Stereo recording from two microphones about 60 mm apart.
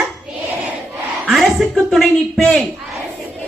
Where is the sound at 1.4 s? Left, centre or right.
Centre.